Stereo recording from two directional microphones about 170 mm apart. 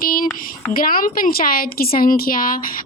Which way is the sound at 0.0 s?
60° left (ahead or behind).